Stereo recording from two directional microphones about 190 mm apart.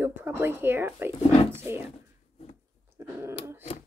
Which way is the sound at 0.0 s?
10° right (ahead or behind).